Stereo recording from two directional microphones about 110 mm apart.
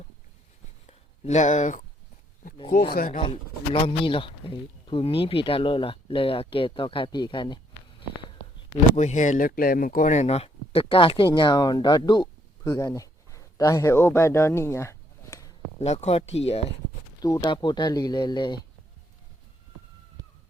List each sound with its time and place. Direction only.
0.9 s a sound: 85° left
2.6 s speech: 55° left (ahead or behind)
9.0 s speech: 90° left; by 15.5 s 30° left (ahead or behind)
15.8 s speech: 75° left (ahead or behind)
17.2 s speech: 30° left (ahead or behind)
17.4 s speech: 45° left (ahead or behind)